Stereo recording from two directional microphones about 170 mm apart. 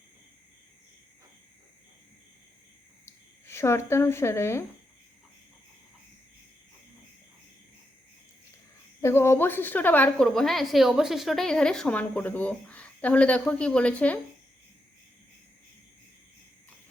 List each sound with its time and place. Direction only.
3.1 s speech: 15° left (ahead or behind)
9.0 s a woman's voice: 15° left (ahead or behind)